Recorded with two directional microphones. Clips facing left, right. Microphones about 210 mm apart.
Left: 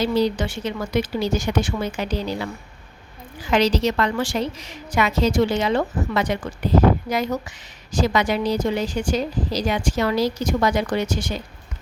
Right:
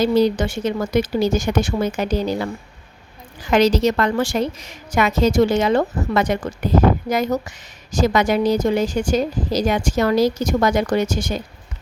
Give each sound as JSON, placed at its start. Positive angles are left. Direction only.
{"t": 0.0, "sound": "a woman's voice", "side_deg": -45}
{"t": 3.5, "sound": "a woman's voice", "side_deg": -45}